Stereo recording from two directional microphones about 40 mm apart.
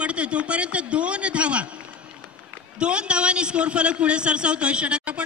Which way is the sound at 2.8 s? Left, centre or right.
Right.